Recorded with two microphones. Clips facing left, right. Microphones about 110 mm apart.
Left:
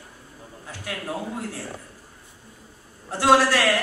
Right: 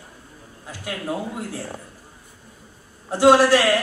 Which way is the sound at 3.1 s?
15° right (ahead or behind).